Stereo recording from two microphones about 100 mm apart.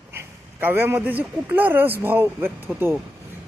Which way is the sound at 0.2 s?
20° right (ahead or behind).